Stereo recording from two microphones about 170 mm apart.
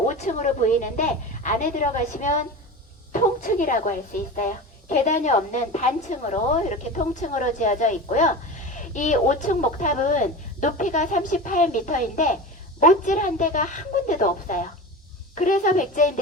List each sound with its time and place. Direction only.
0.1 s speech: 45° left (ahead or behind)